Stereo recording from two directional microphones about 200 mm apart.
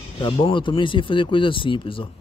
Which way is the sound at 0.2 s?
25° left (ahead or behind).